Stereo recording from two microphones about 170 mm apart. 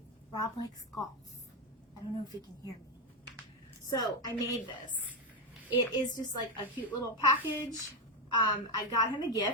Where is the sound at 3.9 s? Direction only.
25° left (ahead or behind).